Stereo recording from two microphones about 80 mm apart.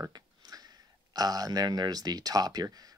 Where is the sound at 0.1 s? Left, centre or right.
Right.